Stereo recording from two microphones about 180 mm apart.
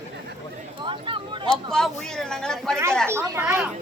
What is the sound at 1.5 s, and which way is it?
A woman's voice, centre (ahead or behind).